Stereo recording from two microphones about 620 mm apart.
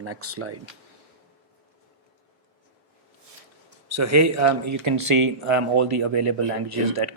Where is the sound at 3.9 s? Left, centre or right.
Right.